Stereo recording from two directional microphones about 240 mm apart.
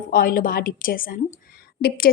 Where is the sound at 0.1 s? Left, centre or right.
Left.